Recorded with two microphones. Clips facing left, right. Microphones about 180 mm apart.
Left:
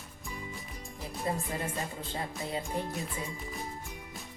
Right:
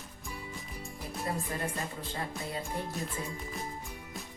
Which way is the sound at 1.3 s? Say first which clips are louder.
Left 2 dB; 25° left (ahead or behind).